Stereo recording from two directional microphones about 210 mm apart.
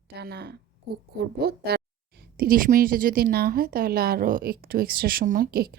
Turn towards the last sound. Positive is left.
turn(degrees=-45)  # may be behind; listen again after turning